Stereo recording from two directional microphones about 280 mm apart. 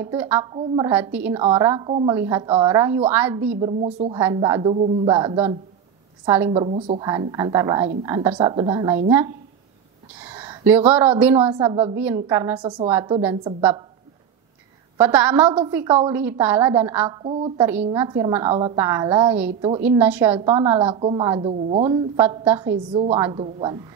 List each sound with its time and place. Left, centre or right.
0.0 s a woman's voice: centre
3.6 s a woman's voice: centre
6.5 s a woman's voice: right
10.4 s a woman's voice: centre
15.0 s a woman's voice: centre